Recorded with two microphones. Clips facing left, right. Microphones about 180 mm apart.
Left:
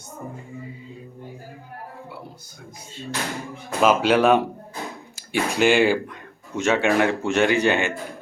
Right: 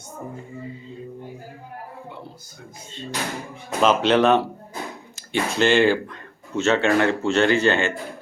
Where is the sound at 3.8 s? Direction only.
10° left (ahead or behind).